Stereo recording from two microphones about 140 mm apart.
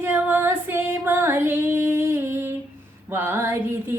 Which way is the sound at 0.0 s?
15° right (ahead or behind).